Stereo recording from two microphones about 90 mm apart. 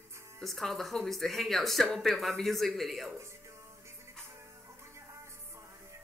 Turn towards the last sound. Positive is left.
turn(degrees=-35)  # may be behind; listen again after turning